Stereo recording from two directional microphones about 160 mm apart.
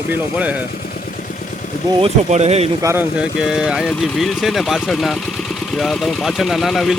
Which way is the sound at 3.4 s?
5° right (ahead or behind).